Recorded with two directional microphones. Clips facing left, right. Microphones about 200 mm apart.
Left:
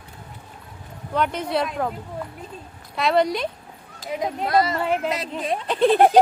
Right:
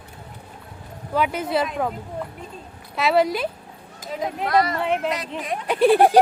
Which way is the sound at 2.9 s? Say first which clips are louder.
Right 1 dB; 5° right (ahead or behind).